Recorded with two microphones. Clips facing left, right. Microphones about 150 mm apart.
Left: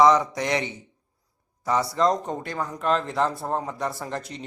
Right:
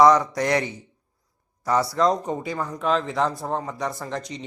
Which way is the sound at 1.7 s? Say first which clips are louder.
Right 1 dB; centre (ahead or behind).